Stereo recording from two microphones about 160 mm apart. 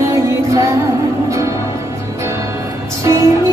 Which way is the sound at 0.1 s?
20° right (ahead or behind).